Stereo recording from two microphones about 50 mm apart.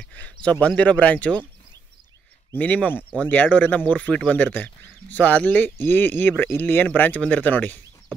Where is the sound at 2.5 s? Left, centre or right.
Left.